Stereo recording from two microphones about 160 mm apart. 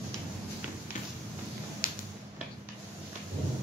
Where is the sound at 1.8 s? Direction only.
60° left (ahead or behind).